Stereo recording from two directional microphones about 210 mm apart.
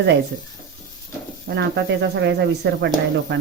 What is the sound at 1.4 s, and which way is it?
Speech, 55° right (ahead or behind).